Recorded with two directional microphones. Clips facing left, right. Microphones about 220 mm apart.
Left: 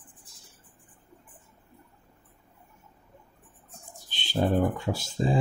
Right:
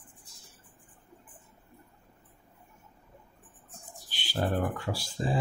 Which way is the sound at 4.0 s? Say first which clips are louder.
Left 5 dB; 20° left (ahead or behind).